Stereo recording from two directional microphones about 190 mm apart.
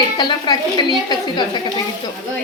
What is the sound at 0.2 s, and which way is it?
Speech, 25° left (ahead or behind).